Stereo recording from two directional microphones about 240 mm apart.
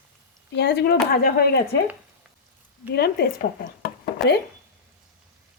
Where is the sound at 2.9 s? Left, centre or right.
Left.